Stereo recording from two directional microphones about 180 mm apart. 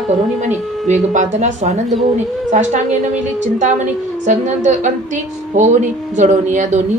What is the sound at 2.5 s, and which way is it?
Female singing, 45° right (ahead or behind).